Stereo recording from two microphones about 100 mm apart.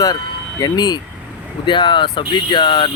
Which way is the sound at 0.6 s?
45° left (ahead or behind).